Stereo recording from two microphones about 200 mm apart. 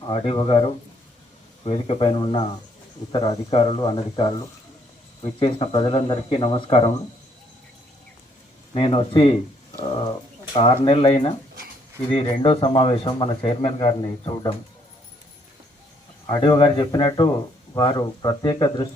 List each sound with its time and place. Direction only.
0.1 s speech: 25° left (ahead or behind)
8.7 s speech: 25° left (ahead or behind)
10.8 s speech: 30° left (ahead or behind)
16.2 s speech: 20° left (ahead or behind)